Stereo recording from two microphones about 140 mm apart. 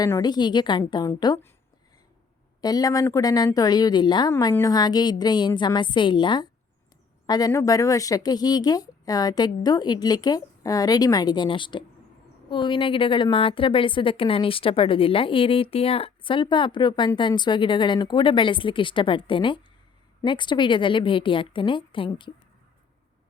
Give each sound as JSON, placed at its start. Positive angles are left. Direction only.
{"t": 0.0, "sound": "speech", "side_deg": 30}
{"t": 2.6, "sound": "a woman's voice", "side_deg": 30}